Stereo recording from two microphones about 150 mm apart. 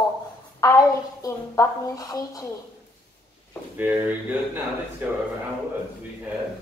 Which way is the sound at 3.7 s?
10° right (ahead or behind).